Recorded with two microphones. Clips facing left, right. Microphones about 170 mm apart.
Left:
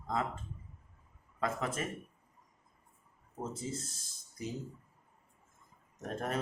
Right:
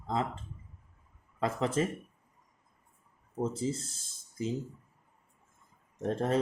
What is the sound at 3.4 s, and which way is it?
Speech, 30° right (ahead or behind).